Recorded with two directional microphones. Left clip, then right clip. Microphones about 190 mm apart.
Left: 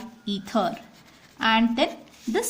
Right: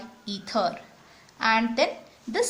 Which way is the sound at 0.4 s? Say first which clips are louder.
Even; 35° left (ahead or behind).